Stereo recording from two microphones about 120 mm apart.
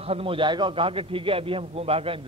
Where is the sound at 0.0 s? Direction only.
55° right (ahead or behind).